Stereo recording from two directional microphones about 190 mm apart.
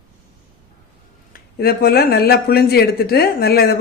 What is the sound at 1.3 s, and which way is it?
Speech, 55° left (ahead or behind).